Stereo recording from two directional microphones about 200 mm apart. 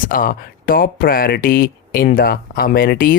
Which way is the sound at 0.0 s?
45° left (ahead or behind).